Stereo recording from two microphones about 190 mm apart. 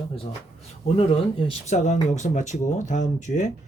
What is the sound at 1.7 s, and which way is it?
Speech, 35° left (ahead or behind).